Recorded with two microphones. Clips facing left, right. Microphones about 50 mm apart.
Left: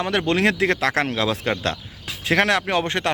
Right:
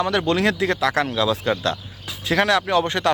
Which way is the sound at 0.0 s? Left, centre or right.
Left.